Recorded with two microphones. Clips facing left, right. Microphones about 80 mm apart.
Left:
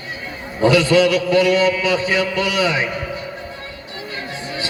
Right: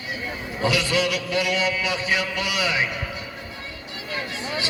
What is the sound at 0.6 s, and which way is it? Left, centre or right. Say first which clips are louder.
Speech: left 9 dB; left.